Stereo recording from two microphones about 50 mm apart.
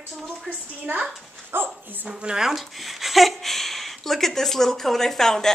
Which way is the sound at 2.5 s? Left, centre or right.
Centre.